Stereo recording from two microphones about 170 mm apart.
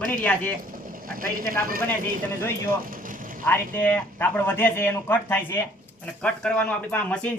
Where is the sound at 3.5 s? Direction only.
10° left (ahead or behind).